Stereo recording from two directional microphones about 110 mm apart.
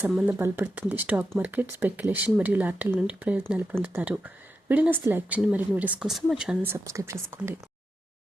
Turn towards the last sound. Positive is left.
turn(degrees=-20)  # may be behind; listen again after turning